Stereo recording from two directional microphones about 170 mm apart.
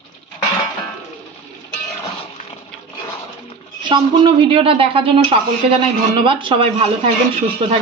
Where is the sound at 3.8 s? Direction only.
30° right (ahead or behind).